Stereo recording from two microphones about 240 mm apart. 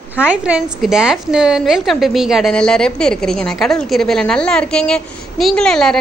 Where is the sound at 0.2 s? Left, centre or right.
Centre.